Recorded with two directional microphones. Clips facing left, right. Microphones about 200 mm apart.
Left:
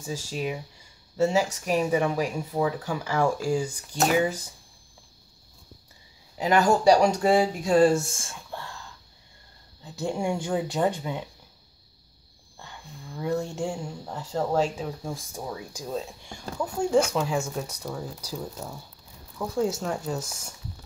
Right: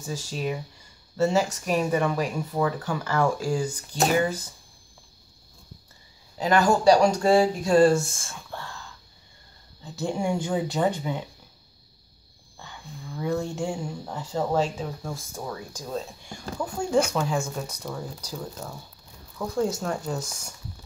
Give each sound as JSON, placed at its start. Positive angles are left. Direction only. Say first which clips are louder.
{"t": 0.0, "sound": "speech", "louder": "even", "side_deg": 10}
{"t": 6.3, "sound": "speech", "louder": "even", "side_deg": 20}
{"t": 9.9, "sound": "speech", "louder": "right 1 dB", "side_deg": 0}
{"t": 13.6, "sound": "speech", "louder": "right 1 dB", "side_deg": -5}
{"t": 15.0, "sound": "speech", "louder": "even", "side_deg": 15}
{"t": 15.9, "sound": "speech", "louder": "even", "side_deg": 0}